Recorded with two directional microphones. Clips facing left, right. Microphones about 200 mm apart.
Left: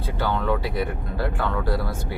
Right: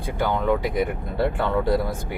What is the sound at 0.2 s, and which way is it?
Speech, 15° right (ahead or behind).